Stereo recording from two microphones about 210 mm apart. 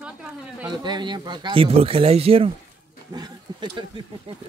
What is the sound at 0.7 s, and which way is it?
Speech, 20° right (ahead or behind).